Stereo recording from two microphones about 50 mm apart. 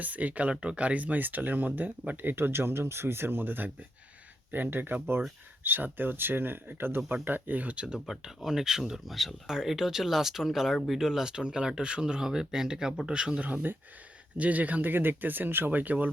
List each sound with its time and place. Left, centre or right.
0.0 s speech: right
2.3 s speech: right
7.9 s speech: centre
13.4 s speech: right